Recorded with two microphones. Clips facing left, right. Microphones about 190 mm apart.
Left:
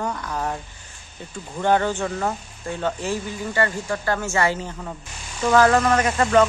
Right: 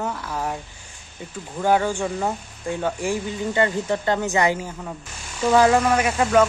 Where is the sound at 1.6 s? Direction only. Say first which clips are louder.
Even; 10° right (ahead or behind).